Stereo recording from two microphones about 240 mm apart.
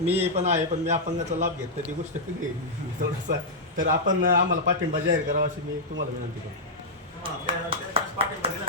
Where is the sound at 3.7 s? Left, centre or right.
Right.